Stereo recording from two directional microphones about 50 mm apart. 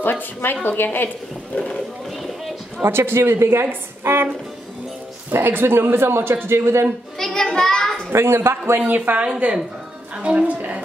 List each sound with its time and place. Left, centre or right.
0.0 s a woman's voice: left
1.5 s speech: left
2.8 s a woman's voice: right
5.3 s a woman's voice: right
7.2 s a sound: centre
8.1 s a woman's voice: right
8.8 s a woman's voice: right